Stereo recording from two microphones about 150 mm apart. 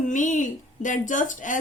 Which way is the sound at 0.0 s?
55° left (ahead or behind).